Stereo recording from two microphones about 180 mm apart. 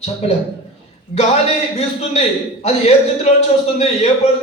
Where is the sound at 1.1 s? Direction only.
35° left (ahead or behind).